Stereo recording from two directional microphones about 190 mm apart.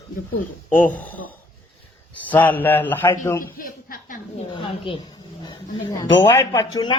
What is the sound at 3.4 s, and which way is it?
A man's voice, 50° left (ahead or behind).